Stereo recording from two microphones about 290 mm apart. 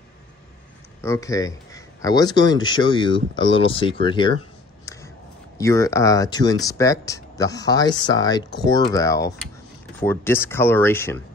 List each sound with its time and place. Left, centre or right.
1.0 s speech: centre
5.6 s speech: centre